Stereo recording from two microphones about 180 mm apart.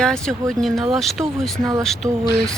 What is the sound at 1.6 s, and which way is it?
Speech, 20° right (ahead or behind).